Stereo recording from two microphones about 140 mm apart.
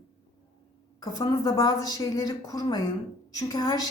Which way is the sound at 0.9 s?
30° left (ahead or behind).